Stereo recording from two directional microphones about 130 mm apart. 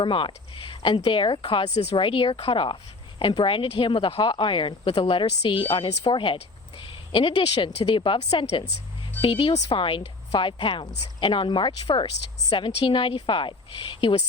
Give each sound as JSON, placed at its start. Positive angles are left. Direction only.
{"t": 0.0, "sound": "speech", "side_deg": 40}